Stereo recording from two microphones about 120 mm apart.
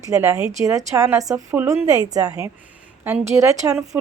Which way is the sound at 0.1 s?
20° right (ahead or behind).